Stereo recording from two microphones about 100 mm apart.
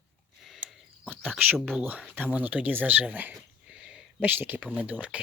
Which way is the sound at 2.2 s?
15° right (ahead or behind).